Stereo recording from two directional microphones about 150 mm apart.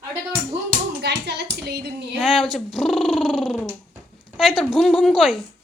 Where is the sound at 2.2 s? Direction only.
Centre (ahead or behind).